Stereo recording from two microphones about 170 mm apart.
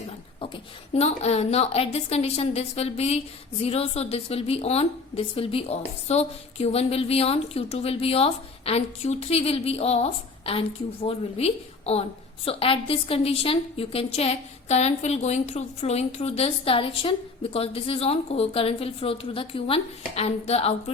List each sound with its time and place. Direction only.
0.3 s a woman's voice: 35° left (ahead or behind)